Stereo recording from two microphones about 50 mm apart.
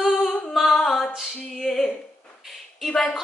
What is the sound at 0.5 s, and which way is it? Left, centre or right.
Music, centre.